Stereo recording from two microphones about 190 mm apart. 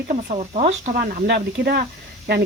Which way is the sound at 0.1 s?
35° right (ahead or behind).